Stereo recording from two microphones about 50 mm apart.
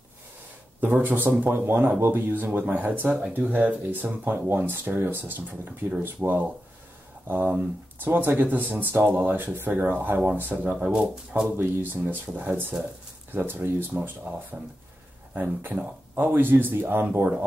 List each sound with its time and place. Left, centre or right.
0.7 s speech: right
4.2 s speech: right
10.9 s speech: centre
11.5 s speech: right
12.7 s speech: centre
13.3 s speech: right
14.2 s speech: right